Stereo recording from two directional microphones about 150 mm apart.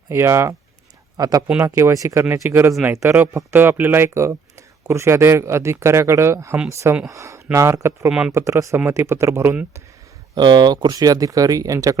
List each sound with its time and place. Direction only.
0.1 s speech: 15° right (ahead or behind)
10.3 s speech: 30° right (ahead or behind)